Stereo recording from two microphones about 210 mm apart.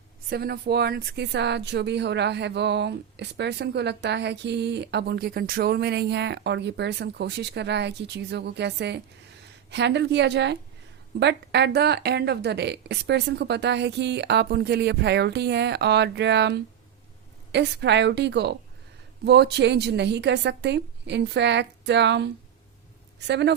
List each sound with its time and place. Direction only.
0.3 s a woman's voice: 50° right (ahead or behind)